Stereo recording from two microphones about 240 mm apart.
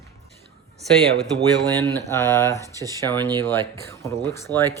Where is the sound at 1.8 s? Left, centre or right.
Centre.